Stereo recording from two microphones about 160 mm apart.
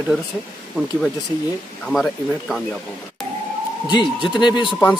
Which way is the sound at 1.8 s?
Centre (ahead or behind).